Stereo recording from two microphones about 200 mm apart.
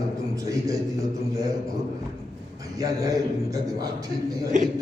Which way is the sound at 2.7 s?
15° right (ahead or behind).